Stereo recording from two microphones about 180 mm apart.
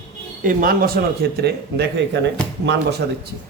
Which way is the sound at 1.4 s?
70° right (ahead or behind).